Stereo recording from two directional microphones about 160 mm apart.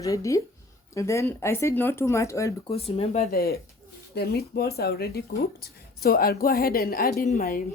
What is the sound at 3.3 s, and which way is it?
A woman's voice, 75° left (ahead or behind).